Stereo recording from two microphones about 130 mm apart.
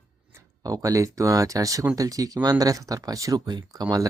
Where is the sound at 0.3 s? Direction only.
25° right (ahead or behind).